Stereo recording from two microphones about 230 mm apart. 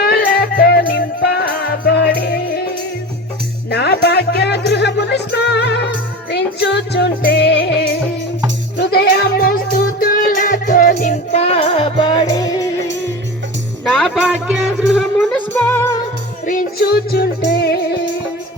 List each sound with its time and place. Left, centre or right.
0.0 s music: left
3.7 s music: left; by 12.6 s centre
13.8 s music: centre
16.5 s music: left